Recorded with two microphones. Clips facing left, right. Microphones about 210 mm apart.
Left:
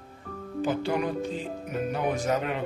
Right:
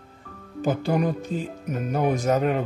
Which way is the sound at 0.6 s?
45° right (ahead or behind).